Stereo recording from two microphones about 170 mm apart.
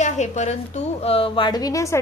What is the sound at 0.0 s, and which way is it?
Speech, 45° left (ahead or behind).